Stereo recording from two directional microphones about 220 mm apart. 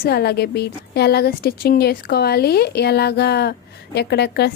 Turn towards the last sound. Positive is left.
turn(degrees=50)  # may be behind; listen again after turning